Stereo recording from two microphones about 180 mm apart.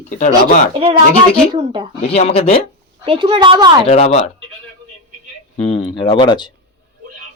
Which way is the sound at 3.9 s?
35° left (ahead or behind).